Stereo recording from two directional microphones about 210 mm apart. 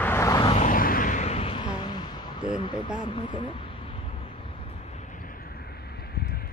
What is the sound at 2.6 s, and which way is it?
Speech, 20° left (ahead or behind).